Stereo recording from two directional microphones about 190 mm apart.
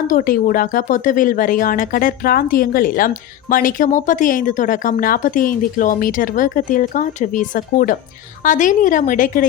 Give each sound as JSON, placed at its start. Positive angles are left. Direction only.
{"t": 0.1, "sound": "speech", "side_deg": 45}